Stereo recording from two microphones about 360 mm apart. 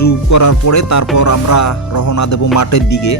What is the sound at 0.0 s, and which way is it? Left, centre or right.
Speech, left.